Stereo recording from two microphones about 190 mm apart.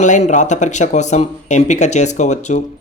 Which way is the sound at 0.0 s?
40° left (ahead or behind).